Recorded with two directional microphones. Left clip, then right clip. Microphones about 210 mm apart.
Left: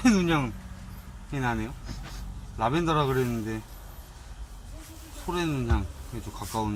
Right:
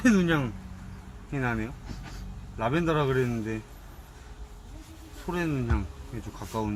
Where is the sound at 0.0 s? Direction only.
20° right (ahead or behind).